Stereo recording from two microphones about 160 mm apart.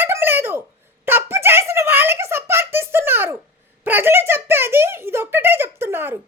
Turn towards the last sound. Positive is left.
turn(degrees=-15)  # may be behind; listen again after turning